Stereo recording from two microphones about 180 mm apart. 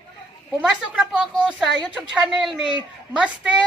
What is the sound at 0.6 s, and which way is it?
A woman's voice, centre (ahead or behind).